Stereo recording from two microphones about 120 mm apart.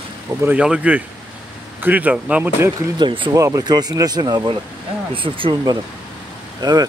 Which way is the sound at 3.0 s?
45° right (ahead or behind).